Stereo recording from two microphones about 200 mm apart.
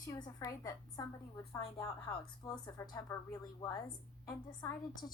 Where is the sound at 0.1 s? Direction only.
20° left (ahead or behind).